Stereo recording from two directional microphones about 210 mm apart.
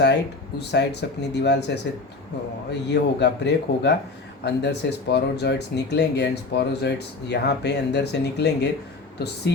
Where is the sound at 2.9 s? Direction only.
55° left (ahead or behind).